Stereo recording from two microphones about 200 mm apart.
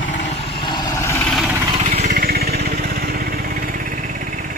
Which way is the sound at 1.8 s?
35° right (ahead or behind).